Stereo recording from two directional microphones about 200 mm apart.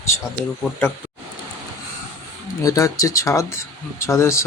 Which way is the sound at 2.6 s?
15° left (ahead or behind).